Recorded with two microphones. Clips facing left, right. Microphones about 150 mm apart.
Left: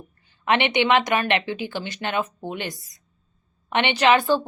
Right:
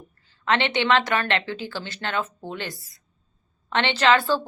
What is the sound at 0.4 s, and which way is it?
A woman's voice, 15° left (ahead or behind).